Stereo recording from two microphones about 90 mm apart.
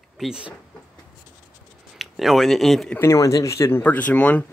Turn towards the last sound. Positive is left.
turn(degrees=15)  # may be behind; listen again after turning